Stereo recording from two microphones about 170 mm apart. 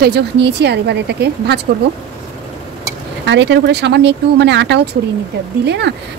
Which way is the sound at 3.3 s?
85° right.